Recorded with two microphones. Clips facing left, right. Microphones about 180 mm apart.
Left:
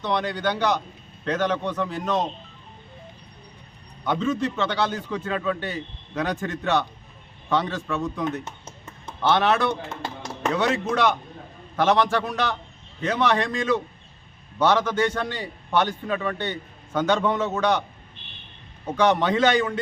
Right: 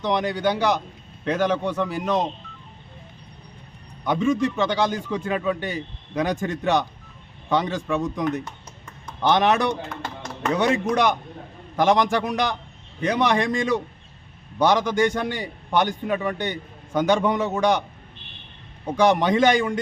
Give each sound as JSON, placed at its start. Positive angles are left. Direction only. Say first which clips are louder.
{"t": 0.0, "sound": "a man's voice", "louder": "right 3 dB", "side_deg": -15}
{"t": 4.0, "sound": "a man's voice", "louder": "right 3 dB", "side_deg": -15}
{"t": 18.9, "sound": "a man's voice", "louder": "right 2 dB", "side_deg": -10}